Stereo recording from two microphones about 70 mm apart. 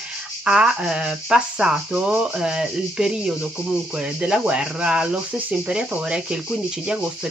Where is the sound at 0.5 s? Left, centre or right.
Centre.